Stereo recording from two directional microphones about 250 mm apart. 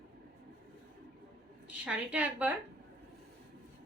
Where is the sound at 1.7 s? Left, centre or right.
Centre.